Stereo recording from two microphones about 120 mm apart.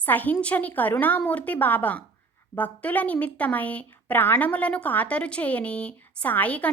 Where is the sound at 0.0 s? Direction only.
15° left (ahead or behind).